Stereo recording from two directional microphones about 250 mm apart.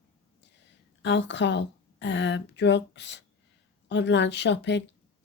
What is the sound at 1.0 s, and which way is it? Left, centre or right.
A woman's voice, left.